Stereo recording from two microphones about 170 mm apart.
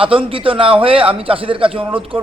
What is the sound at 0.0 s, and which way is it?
A man's voice, 30° right (ahead or behind).